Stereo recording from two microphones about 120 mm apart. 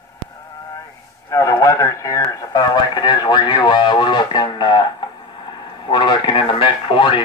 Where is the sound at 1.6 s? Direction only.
25° left (ahead or behind).